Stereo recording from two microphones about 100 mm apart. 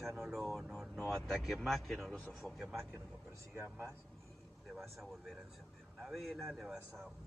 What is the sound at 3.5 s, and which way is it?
Speech, 25° right (ahead or behind).